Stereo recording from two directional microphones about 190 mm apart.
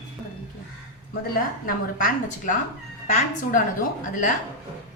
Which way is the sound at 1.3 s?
45° left (ahead or behind).